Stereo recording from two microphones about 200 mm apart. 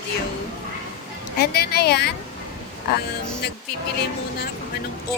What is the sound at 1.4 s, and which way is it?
Speech, 50° left (ahead or behind).